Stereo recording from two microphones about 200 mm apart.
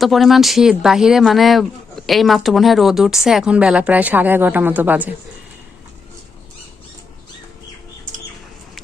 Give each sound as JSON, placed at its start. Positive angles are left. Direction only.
{"t": 0.0, "sound": "speech", "side_deg": 0}
{"t": 8.1, "sound": "bird flight", "side_deg": -40}